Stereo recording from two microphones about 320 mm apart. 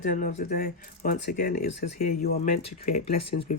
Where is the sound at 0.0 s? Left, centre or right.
Left.